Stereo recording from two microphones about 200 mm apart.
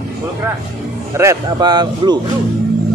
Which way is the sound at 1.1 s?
15° right (ahead or behind).